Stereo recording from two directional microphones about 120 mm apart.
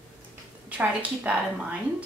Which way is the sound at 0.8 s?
10° right (ahead or behind).